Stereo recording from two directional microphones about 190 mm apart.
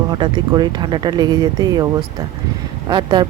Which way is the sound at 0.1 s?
25° right (ahead or behind).